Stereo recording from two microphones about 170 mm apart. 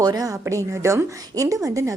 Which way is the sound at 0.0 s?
20° right (ahead or behind).